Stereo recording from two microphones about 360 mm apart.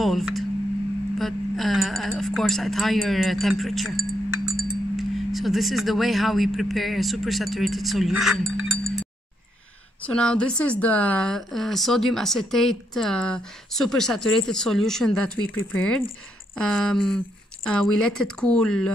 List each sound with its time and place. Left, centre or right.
0.0 s speech: centre
10.0 s speech: centre